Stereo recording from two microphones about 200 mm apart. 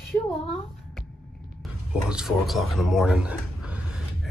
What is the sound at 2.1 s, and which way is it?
Speech, centre (ahead or behind).